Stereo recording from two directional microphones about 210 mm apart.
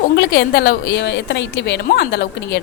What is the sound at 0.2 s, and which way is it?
A woman's voice, 50° left (ahead or behind).